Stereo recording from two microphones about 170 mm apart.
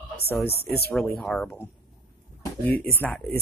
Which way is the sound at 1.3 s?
5° left (ahead or behind).